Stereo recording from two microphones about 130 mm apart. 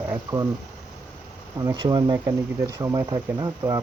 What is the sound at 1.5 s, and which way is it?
Speech, 35° right (ahead or behind).